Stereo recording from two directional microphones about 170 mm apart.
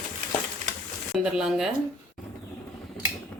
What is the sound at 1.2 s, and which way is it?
Speech, 5° right (ahead or behind).